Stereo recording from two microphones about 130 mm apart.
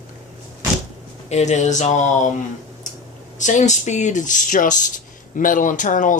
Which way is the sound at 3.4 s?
70° left (ahead or behind).